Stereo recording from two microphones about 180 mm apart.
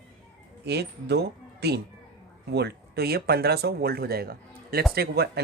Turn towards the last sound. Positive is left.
turn(degrees=-60)  # may be behind; listen again after turning